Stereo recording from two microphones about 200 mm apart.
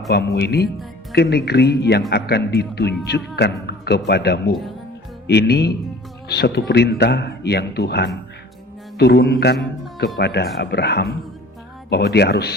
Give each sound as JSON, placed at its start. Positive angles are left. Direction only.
{"t": 0.1, "sound": "speech", "side_deg": 55}